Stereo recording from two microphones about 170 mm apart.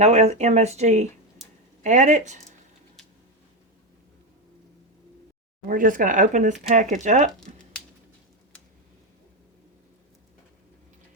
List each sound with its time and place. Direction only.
0.0 s speech: 40° right (ahead or behind)
5.6 s speech: 55° right (ahead or behind)